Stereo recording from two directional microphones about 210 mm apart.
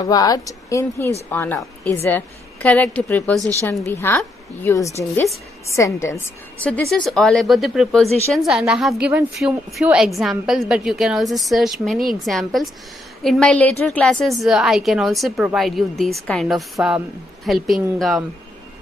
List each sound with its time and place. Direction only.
0.0 s a woman's voice: 15° left (ahead or behind); by 18.2 s centre (ahead or behind)